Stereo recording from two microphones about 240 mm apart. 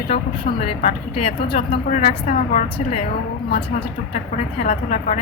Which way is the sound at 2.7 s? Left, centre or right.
Left.